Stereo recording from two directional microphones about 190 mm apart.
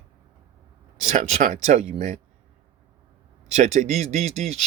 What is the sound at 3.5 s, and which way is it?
Speech, 35° right (ahead or behind).